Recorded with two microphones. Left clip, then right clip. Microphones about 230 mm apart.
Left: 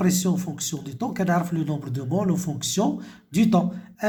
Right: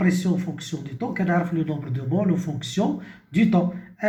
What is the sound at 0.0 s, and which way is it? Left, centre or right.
Speech, left.